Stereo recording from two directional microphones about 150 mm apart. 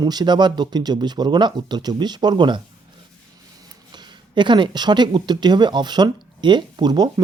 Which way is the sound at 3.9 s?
30° right (ahead or behind).